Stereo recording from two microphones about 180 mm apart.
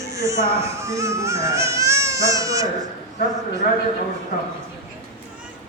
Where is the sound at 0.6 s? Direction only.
15° right (ahead or behind).